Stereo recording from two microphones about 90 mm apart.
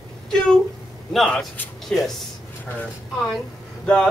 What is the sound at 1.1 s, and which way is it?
Speech, 5° left (ahead or behind).